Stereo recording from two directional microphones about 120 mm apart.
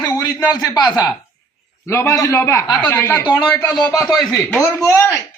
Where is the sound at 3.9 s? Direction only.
30° left (ahead or behind).